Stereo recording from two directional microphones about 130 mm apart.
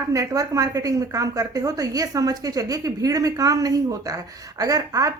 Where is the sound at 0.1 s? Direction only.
25° right (ahead or behind).